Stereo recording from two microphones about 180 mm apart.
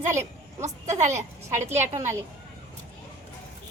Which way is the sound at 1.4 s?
15° right (ahead or behind).